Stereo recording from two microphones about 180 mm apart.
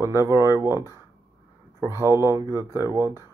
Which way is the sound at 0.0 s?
15° right (ahead or behind).